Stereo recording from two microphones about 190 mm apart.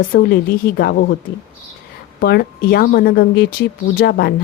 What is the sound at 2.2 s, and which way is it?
A woman's voice, 60° left (ahead or behind).